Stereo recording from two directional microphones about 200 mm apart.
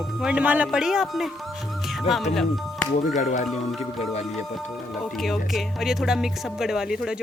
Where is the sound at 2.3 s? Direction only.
Centre (ahead or behind).